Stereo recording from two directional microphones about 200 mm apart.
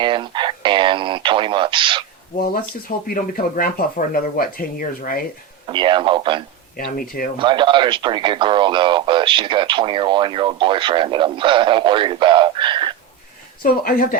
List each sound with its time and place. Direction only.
0.0 s speech: 25° right (ahead or behind)
3.1 s speech: 45° left (ahead or behind)
5.6 s speech: 25° right (ahead or behind)
6.9 s speech: 45° left (ahead or behind)
7.3 s speech: 25° right (ahead or behind)
13.6 s speech: 45° left (ahead or behind)